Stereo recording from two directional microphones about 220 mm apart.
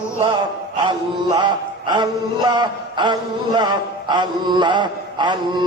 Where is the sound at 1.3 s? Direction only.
20° right (ahead or behind).